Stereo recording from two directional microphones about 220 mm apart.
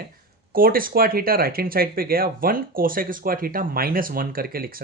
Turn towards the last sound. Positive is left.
turn(degrees=-40)  # may be behind; listen again after turning